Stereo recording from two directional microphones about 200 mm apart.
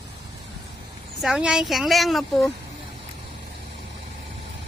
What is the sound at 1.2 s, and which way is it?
Speech, 5° right (ahead or behind).